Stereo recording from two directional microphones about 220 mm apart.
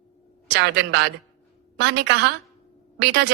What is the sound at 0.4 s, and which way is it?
A woman's voice, 50° right (ahead or behind).